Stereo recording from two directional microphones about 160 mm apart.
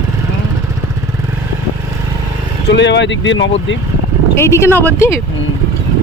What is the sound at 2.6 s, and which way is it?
Speech, 90° left.